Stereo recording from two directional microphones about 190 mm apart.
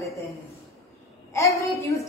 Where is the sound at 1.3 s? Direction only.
15° left (ahead or behind).